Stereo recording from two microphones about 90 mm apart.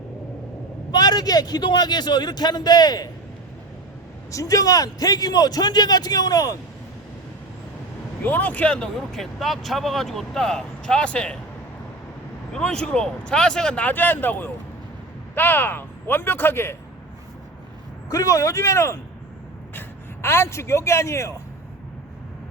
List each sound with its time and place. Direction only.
0.9 s speech: 50° left (ahead or behind)
4.3 s speech: 40° left (ahead or behind)
8.2 s speech: 20° left (ahead or behind)
12.5 s speech: 10° left (ahead or behind); by 16.7 s 25° left (ahead or behind)
18.1 s speech: 40° left (ahead or behind)
20.2 s speech: 30° left (ahead or behind)